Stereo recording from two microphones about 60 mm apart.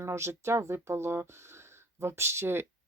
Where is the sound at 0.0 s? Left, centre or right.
Right.